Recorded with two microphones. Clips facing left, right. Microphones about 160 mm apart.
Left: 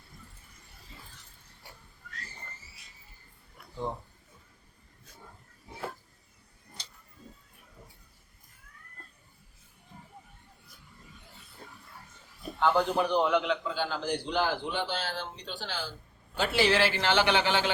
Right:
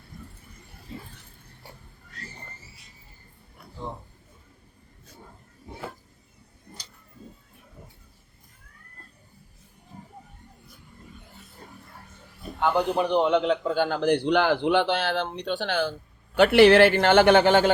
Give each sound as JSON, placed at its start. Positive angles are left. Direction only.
{"t": 0.1, "sound": "a sound", "side_deg": -65}
{"t": 11.6, "sound": "pig", "side_deg": -45}
{"t": 12.5, "sound": "a man's voice", "side_deg": -15}
{"t": 13.7, "sound": "a man's voice", "side_deg": -55}